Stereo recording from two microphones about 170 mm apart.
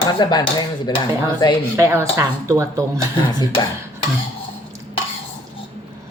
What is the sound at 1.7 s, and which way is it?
Speech, 15° right (ahead or behind).